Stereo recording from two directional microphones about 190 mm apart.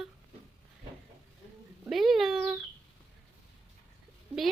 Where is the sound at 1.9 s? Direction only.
Centre (ahead or behind).